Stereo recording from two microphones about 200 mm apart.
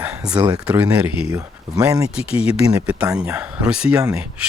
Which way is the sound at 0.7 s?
10° right (ahead or behind).